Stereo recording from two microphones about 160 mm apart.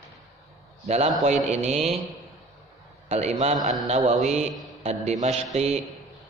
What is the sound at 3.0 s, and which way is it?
Mantra, 40° right (ahead or behind).